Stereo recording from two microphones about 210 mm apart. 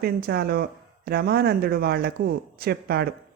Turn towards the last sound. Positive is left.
turn(degrees=-50)  # may be behind; listen again after turning